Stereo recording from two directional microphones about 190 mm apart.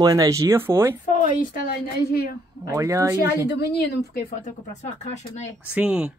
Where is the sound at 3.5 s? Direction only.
65° left (ahead or behind).